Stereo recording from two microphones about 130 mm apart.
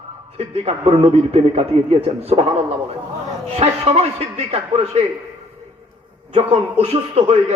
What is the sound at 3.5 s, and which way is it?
A man's voice, 50° right (ahead or behind).